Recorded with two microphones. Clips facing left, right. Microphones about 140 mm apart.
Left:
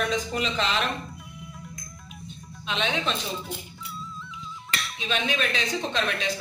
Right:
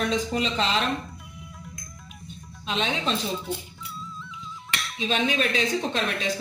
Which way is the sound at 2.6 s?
40° right (ahead or behind).